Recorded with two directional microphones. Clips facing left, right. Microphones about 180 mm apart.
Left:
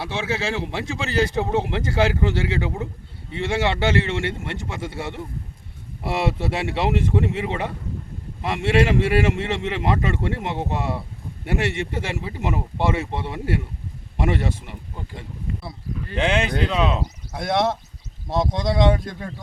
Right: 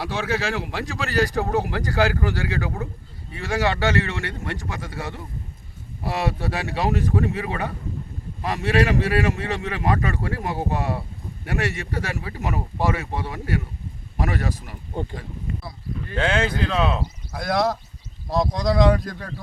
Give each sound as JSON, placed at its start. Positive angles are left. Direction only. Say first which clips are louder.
{"t": 0.0, "sound": "speech", "louder": "right 1 dB", "side_deg": 25}
{"t": 16.1, "sound": "speech", "louder": "left 1 dB", "side_deg": 20}